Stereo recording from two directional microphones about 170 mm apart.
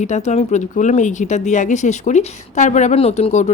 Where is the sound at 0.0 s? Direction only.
45° left (ahead or behind).